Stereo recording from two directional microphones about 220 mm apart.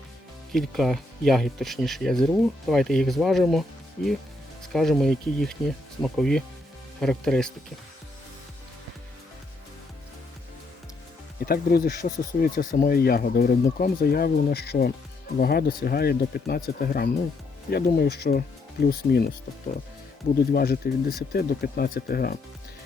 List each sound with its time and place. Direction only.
0.5 s speech: centre (ahead or behind)
11.4 s speech: 45° left (ahead or behind)
20.5 s speech: 45° left (ahead or behind)